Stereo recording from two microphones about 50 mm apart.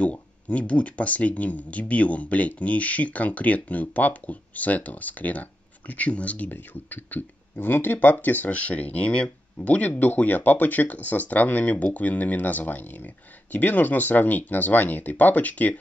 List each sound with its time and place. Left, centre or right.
0.0 s speech: left
6.5 s speech: left